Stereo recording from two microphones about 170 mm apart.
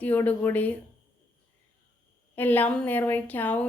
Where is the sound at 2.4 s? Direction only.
10° left (ahead or behind).